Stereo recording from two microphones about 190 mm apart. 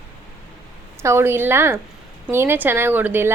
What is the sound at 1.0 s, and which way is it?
A woman's voice, 15° right (ahead or behind).